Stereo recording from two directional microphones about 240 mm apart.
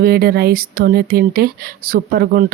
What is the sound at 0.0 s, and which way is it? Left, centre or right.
Speech, right.